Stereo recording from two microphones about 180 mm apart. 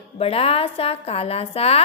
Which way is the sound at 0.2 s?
35° left (ahead or behind).